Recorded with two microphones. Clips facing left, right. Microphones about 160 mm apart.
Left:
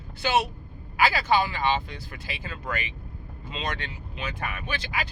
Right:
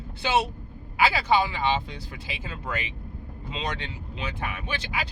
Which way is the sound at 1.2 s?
20° right (ahead or behind).